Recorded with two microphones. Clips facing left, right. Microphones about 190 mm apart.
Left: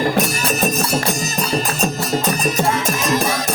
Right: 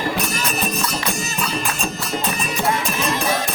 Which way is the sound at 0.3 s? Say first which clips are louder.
Left 4 dB; 45° left (ahead or behind).